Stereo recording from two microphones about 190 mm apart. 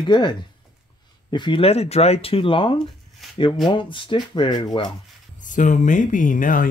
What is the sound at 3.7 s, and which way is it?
Speech, 25° left (ahead or behind).